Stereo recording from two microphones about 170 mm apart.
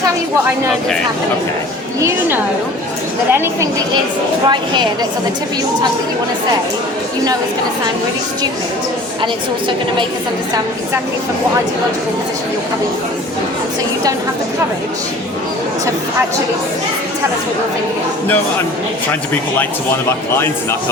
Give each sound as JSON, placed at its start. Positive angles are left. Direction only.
{"t": 2.0, "sound": "a woman's voice", "side_deg": -15}
{"t": 4.4, "sound": "a woman's voice", "side_deg": -25}
{"t": 9.2, "sound": "a woman's voice", "side_deg": -30}
{"t": 19.3, "sound": "speech", "side_deg": 10}